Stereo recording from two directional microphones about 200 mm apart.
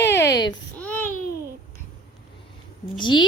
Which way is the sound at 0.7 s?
10° left (ahead or behind).